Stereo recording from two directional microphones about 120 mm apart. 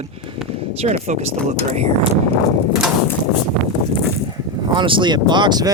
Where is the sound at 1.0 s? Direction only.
70° right (ahead or behind).